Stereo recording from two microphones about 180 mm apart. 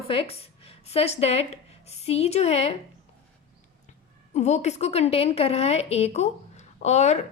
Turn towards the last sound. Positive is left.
turn(degrees=40)  # may be behind; listen again after turning